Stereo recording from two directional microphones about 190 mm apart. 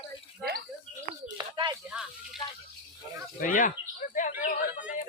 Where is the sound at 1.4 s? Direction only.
20° right (ahead or behind).